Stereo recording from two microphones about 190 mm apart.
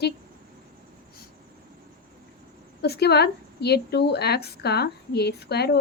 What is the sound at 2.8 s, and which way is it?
Speech, 60° left (ahead or behind).